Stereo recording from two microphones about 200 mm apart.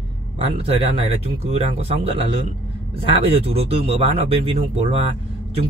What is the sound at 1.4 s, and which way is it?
Speech, 30° right (ahead or behind).